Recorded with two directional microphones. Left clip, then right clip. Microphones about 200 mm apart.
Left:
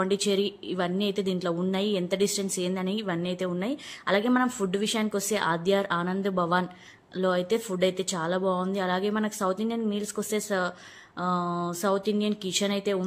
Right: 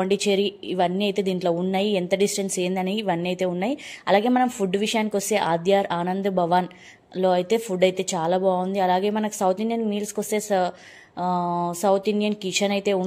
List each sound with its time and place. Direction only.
0.0 s a woman's voice: 10° right (ahead or behind)